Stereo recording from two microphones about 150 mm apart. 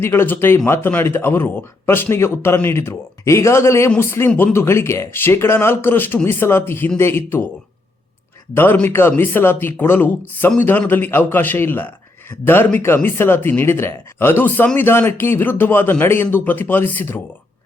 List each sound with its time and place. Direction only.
0.0 s speech: 15° left (ahead or behind)
8.5 s speech: 15° left (ahead or behind)